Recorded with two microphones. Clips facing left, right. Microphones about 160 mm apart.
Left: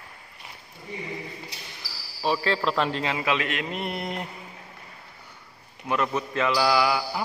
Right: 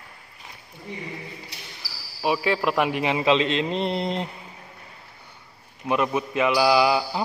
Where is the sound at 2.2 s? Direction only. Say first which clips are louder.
Right 2 dB; 10° right (ahead or behind).